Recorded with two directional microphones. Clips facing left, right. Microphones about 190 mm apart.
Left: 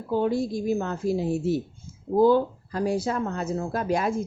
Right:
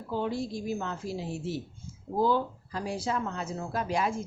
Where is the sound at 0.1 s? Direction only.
50° left (ahead or behind).